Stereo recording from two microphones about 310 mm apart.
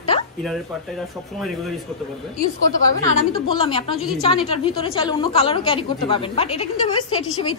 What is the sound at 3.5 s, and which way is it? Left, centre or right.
A woman's voice, centre.